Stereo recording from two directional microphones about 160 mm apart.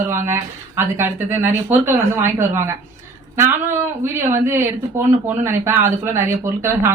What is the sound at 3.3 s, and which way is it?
Speech, 15° right (ahead or behind).